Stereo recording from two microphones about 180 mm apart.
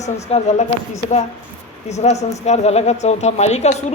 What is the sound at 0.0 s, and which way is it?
Speech, 35° left (ahead or behind).